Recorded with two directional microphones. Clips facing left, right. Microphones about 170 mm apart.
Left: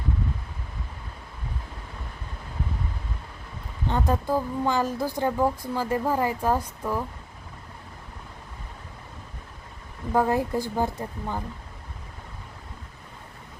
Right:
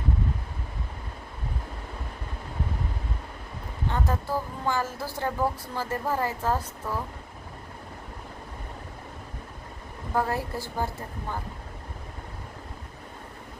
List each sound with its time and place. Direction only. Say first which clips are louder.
3.9 s speech: left 5 dB; 15° left (ahead or behind)
10.2 s speech: left 5 dB; 20° left (ahead or behind)